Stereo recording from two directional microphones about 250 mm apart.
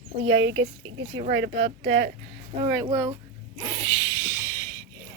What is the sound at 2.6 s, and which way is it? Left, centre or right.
Speech, centre.